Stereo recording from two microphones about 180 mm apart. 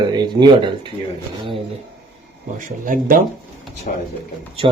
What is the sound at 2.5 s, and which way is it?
Speech, 50° right (ahead or behind).